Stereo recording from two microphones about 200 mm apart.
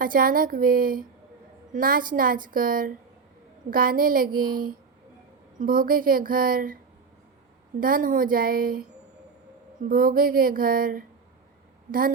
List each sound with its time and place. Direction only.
0.0 s a woman's voice: 45° right (ahead or behind)
7.8 s a woman's voice: 45° right (ahead or behind)
9.8 s a woman's voice: 45° right (ahead or behind)